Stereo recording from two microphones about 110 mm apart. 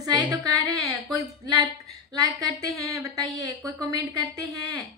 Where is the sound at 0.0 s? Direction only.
40° right (ahead or behind).